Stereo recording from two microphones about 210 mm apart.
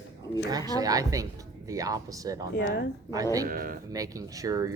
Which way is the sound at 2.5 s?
50° left (ahead or behind).